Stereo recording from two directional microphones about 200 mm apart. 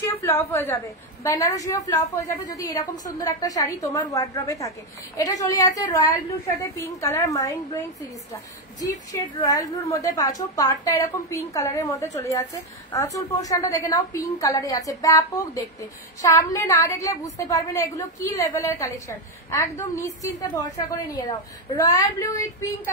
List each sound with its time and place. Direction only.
0.2 s a woman's voice: 10° left (ahead or behind)